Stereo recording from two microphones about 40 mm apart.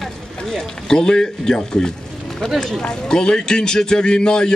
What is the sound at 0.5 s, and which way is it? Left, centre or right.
A man's voice, centre.